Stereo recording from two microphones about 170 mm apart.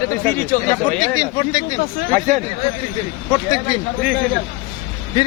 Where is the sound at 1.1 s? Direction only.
25° left (ahead or behind).